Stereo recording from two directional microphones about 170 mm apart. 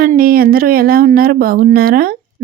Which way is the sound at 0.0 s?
60° right (ahead or behind).